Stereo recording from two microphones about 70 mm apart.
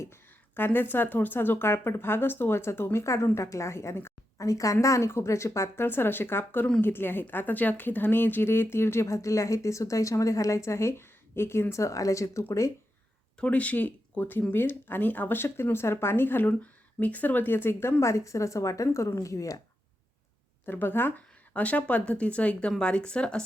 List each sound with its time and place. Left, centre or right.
0.5 s speech: left
4.4 s speech: left
13.4 s speech: centre; by 17.9 s left
18.0 s speech: left
20.7 s speech: left
21.5 s speech: centre